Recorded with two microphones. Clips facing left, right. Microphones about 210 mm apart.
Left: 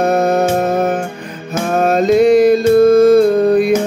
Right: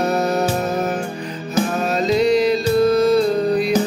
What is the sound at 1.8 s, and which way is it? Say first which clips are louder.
Music: left 9 dB; 50° left (ahead or behind).